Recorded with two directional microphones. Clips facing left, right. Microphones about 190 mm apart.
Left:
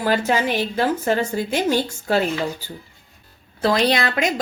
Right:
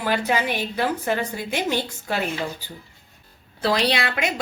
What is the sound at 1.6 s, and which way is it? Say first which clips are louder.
Speech: left 5 dB; 40° left (ahead or behind).